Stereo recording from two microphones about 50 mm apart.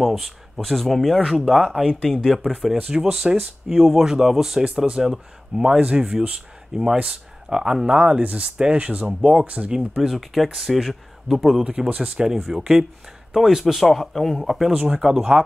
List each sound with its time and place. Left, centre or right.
0.0 s speech: centre
2.9 s speech: centre
6.7 s speech: centre
8.0 s speech: right
9.8 s speech: centre
10.1 s speech: centre
13.8 s speech: centre
14.7 s speech: centre